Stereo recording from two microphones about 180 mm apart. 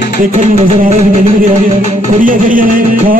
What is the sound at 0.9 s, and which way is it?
Music, 45° right (ahead or behind).